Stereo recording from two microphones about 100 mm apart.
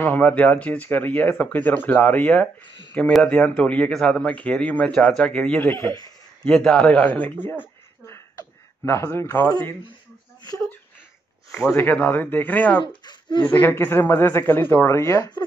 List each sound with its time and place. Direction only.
0.0 s speech: 15° left (ahead or behind)
5.7 s a man's voice: 30° left (ahead or behind)
6.4 s speech: 10° left (ahead or behind)
11.7 s speech: 20° left (ahead or behind)
12.8 s speech: 50° left (ahead or behind)
13.6 s speech: 20° left (ahead or behind)